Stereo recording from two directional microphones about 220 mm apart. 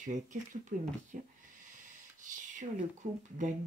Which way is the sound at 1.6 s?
35° right (ahead or behind).